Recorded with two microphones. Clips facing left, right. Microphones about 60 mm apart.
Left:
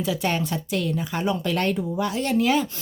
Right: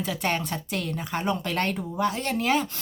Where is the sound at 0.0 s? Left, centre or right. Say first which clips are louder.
Left 3 dB; right.